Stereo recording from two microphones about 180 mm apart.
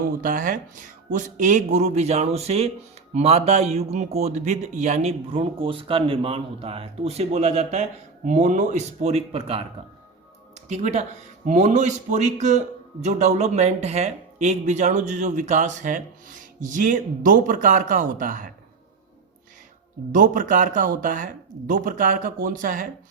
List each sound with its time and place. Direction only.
0.2 s a man's voice: 50° right (ahead or behind)
20.1 s a man's voice: 45° right (ahead or behind)